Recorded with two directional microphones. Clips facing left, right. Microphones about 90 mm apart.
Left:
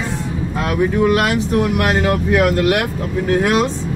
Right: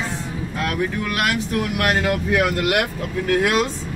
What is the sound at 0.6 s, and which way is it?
Speech, 25° left (ahead or behind).